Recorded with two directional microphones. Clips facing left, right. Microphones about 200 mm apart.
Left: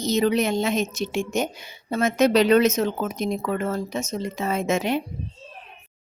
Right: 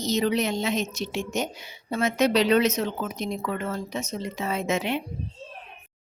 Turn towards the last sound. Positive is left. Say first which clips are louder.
# left 3 dB
turn(degrees=45)  # may be behind; listen again after turning